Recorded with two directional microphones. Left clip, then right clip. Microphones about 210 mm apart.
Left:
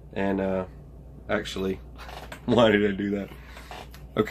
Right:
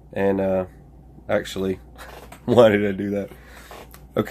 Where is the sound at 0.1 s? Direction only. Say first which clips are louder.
Right 6 dB; 45° right (ahead or behind).